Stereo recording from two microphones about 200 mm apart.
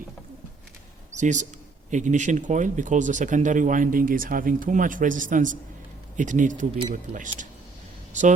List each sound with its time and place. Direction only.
1.1 s speech: 35° right (ahead or behind)